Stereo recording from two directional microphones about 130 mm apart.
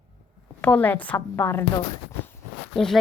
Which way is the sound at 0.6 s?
10° left (ahead or behind).